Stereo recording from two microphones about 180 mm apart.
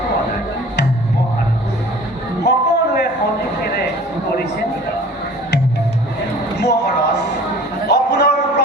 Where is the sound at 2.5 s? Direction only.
70° left (ahead or behind).